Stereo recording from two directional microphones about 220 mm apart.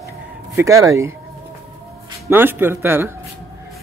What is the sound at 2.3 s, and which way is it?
Speech, 10° right (ahead or behind).